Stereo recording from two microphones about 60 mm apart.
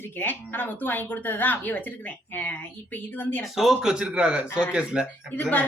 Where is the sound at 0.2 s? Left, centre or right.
Left.